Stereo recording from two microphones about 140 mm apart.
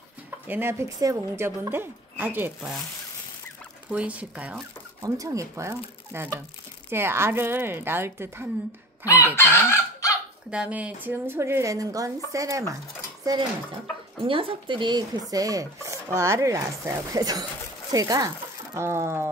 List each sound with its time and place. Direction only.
0.5 s a woman's voice: 15° right (ahead or behind)
3.9 s a woman's voice: 10° right (ahead or behind)
4.6 s a woman's voice: 25° right (ahead or behind)
9.0 s chicken: 20° left (ahead or behind)
10.5 s a woman's voice: 10° right (ahead or behind); by 13.5 s 30° right (ahead or behind)
14.2 s speech: 40° right (ahead or behind); by 19.2 s 20° right (ahead or behind)